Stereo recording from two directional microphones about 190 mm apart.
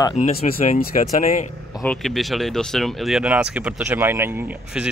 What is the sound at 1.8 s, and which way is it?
Speech, 5° left (ahead or behind).